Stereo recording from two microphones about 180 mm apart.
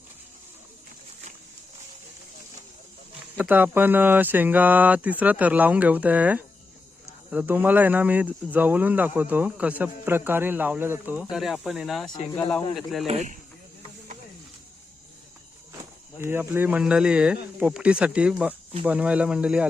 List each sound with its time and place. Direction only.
3.3 s a man's voice: 10° right (ahead or behind)
13.1 s speech: 40° right (ahead or behind)
15.7 s a man's voice: 15° right (ahead or behind)